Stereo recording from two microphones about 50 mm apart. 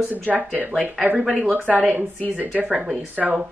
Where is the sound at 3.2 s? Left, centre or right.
Centre.